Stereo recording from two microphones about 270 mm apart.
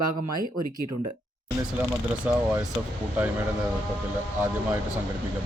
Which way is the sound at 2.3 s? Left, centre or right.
Centre.